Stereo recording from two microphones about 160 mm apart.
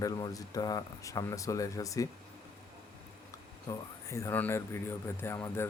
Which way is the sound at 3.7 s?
20° left (ahead or behind).